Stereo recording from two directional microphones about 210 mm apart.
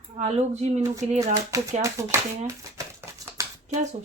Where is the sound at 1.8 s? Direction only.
15° right (ahead or behind).